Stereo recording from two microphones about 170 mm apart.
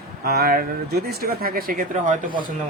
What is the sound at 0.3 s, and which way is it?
Speech, 65° right (ahead or behind).